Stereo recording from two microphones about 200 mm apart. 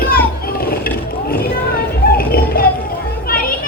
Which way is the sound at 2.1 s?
50° left (ahead or behind).